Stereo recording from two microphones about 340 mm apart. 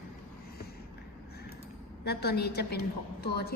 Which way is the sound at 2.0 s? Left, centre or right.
Left.